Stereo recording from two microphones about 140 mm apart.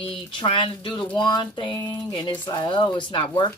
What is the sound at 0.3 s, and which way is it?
Speech, 35° left (ahead or behind).